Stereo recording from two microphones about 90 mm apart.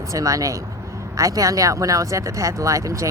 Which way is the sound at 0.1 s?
40° right (ahead or behind).